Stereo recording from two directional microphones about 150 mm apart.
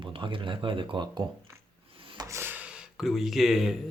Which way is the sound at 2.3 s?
15° right (ahead or behind).